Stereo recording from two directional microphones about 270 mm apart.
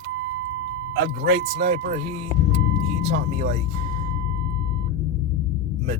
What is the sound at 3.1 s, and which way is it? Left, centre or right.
Speech, right.